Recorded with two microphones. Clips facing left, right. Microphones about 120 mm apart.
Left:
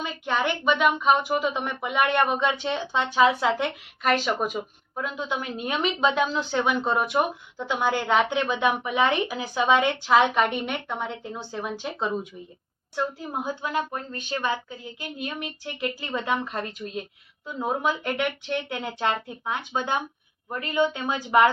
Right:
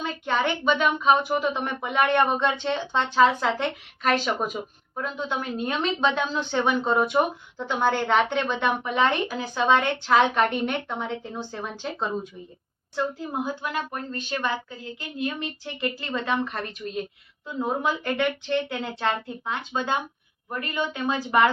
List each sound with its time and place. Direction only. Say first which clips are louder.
0.0 s a woman's voice: right 1 dB; 5° left (ahead or behind)
13.4 s a woman's voice: left 2 dB; 15° left (ahead or behind)